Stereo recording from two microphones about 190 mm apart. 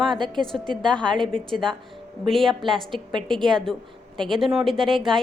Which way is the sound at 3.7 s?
5° left (ahead or behind).